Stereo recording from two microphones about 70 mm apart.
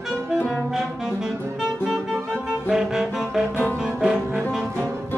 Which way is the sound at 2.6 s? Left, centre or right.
Centre.